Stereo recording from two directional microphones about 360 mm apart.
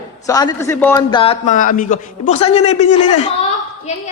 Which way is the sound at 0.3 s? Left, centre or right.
Centre.